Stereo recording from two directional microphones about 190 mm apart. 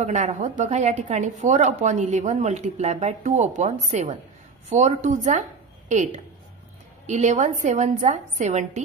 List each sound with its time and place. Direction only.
0.0 s a woman's voice: 35° right (ahead or behind)